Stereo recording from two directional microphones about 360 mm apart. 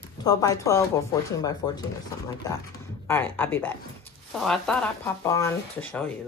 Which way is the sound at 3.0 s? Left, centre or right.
Centre.